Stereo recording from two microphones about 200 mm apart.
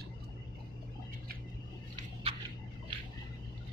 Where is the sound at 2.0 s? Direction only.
30° right (ahead or behind).